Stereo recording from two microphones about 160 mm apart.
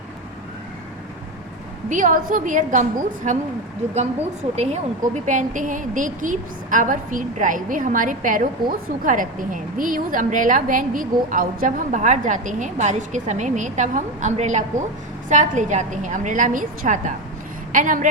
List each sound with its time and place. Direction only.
1.9 s a woman's voice: 55° right (ahead or behind)
4.5 s a woman's voice: 45° right (ahead or behind)